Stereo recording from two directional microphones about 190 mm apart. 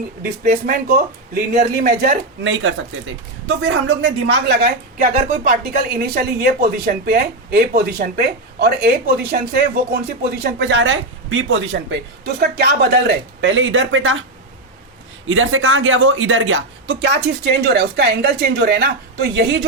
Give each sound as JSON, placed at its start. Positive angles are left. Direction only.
{"t": 0.2, "sound": "speech", "side_deg": -55}
{"t": 15.3, "sound": "speech", "side_deg": -90}